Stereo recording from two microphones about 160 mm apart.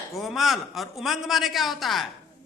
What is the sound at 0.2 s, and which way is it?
A man's voice, centre (ahead or behind).